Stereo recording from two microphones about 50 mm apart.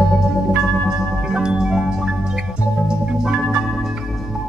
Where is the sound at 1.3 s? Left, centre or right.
Centre.